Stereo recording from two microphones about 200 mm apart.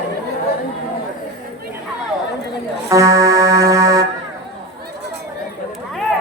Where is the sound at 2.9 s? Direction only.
15° right (ahead or behind).